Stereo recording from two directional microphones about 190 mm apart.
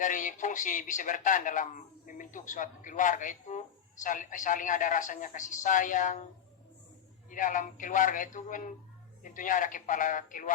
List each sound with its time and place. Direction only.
0.0 s speech: 40° left (ahead or behind)
7.3 s speech: 45° left (ahead or behind)